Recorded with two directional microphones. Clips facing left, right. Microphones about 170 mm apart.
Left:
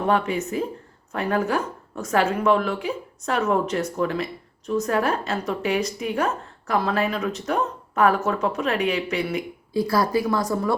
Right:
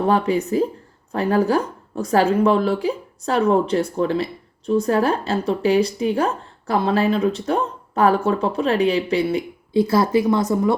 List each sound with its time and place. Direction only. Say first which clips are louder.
0.0 s a woman's voice: right 4 dB; 35° right (ahead or behind)